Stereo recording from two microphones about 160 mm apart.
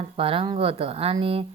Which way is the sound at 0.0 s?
35° right (ahead or behind).